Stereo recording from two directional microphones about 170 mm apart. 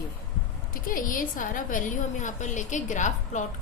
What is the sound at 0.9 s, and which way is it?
A woman's voice, 55° left (ahead or behind).